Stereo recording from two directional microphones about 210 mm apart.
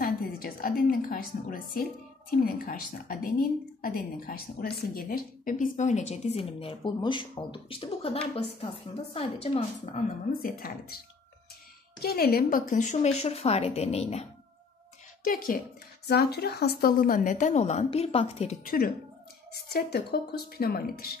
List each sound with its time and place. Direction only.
0.0 s a woman's voice: 45° left (ahead or behind); by 10.0 s 30° left (ahead or behind)
10.4 s a woman's voice: 45° left (ahead or behind)
12.0 s a woman's voice: 45° left (ahead or behind); by 14.2 s 30° left (ahead or behind)
15.2 s a woman's voice: 40° left (ahead or behind)
18.6 s a woman's voice: 45° left (ahead or behind)